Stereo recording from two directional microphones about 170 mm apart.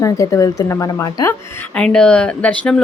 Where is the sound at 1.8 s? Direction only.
5° left (ahead or behind).